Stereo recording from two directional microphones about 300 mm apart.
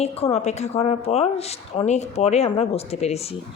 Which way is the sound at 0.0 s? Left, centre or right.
Left.